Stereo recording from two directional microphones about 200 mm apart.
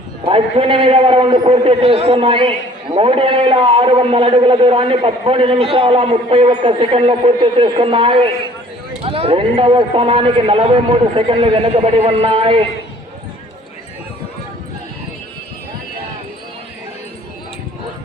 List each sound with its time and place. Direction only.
0.3 s a man's voice: 30° right (ahead or behind)